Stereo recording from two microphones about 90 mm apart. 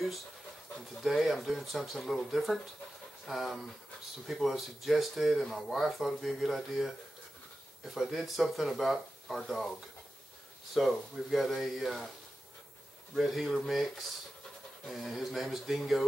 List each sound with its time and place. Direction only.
1.0 s speech: centre (ahead or behind)
10.7 s speech: centre (ahead or behind)
13.1 s speech: centre (ahead or behind)
14.9 s speech: centre (ahead or behind)